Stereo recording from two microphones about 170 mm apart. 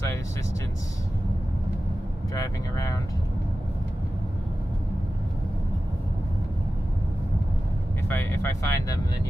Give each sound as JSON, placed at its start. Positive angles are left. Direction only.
{"t": 2.3, "sound": "vehicle", "side_deg": 20}
{"t": 8.1, "sound": "vehicle", "side_deg": 15}